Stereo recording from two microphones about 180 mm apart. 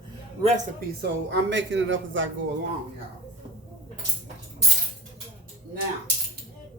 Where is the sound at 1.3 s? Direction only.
85° right.